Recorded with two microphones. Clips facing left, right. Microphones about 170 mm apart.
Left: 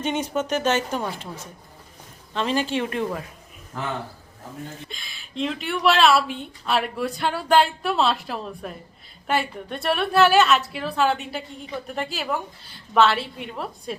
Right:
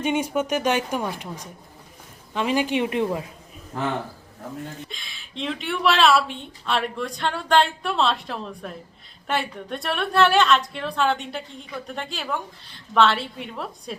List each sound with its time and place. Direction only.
0.0 s speech: 10° right (ahead or behind)
2.3 s speech: 10° right (ahead or behind)
3.7 s a man's voice: 35° right (ahead or behind)
4.9 s a woman's voice: centre (ahead or behind)